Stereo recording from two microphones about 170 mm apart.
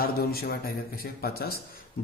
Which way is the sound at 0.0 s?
60° left (ahead or behind).